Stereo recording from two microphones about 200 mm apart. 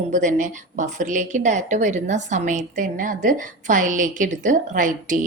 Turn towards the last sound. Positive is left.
turn(degrees=-40)  # may be behind; listen again after turning